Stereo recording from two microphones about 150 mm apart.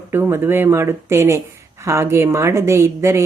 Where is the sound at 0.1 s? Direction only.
15° right (ahead or behind).